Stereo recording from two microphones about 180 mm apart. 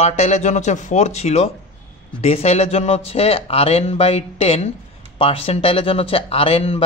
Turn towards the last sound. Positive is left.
turn(degrees=35)  # may be behind; listen again after turning